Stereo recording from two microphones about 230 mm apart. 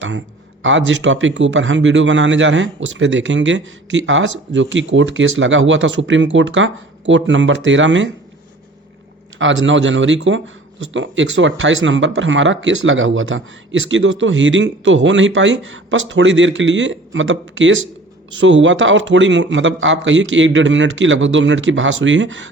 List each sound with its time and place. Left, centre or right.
0.6 s a man's voice: right
9.4 s a man's voice: right